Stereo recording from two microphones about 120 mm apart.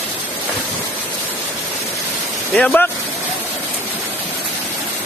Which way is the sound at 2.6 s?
5° left (ahead or behind).